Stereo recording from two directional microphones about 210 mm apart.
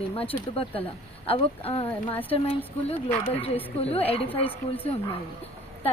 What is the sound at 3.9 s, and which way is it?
Speech, 30° left (ahead or behind).